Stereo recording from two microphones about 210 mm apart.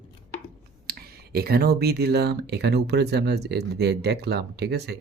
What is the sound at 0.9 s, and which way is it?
Speech, 45° right (ahead or behind).